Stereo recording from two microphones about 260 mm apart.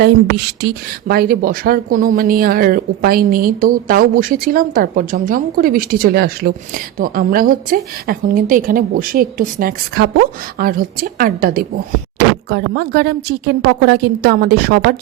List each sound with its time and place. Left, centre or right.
0.0 s speech: right